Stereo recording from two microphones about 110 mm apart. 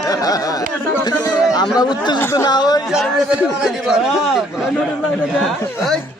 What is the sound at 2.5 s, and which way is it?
Speech, 40° left (ahead or behind).